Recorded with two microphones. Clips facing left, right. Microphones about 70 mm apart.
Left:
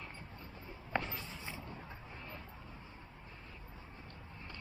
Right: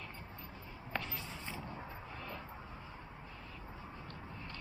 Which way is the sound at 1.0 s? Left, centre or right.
Centre.